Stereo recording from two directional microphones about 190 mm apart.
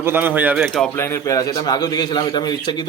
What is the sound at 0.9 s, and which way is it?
A man's voice, 15° left (ahead or behind).